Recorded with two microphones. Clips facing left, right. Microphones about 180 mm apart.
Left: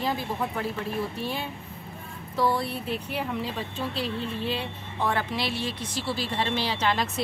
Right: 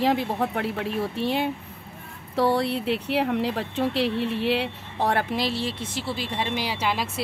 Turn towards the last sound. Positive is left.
turn(degrees=-5)  # may be behind; listen again after turning